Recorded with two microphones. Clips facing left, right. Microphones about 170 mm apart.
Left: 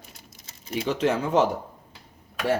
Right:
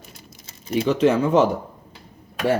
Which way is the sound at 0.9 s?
60° right (ahead or behind).